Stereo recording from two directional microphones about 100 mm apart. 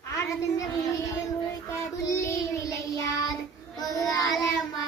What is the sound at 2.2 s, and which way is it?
Child singing, 35° left (ahead or behind).